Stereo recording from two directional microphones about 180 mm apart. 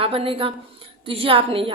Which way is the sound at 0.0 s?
30° right (ahead or behind).